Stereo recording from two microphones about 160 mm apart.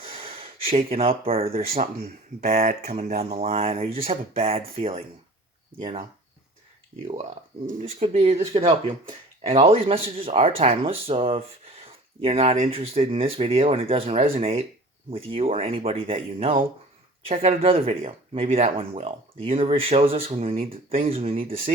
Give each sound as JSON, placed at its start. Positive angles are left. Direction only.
{"t": 0.0, "sound": "speech", "side_deg": -35}
{"t": 7.8, "sound": "speech", "side_deg": -40}